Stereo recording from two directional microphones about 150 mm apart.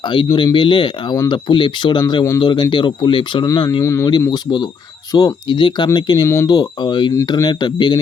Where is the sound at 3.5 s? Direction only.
20° left (ahead or behind).